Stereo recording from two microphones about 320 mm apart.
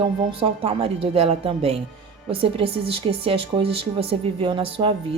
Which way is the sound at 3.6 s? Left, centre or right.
Right.